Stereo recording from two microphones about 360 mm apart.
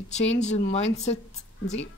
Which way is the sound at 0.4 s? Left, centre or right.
Centre.